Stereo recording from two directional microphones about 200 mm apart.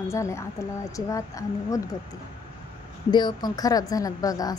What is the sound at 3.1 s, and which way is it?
A woman's voice, 20° left (ahead or behind).